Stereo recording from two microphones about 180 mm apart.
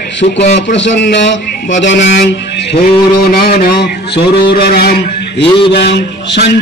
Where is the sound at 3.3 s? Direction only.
55° left (ahead or behind).